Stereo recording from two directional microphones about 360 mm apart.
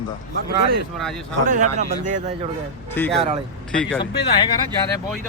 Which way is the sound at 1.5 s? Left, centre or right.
Centre.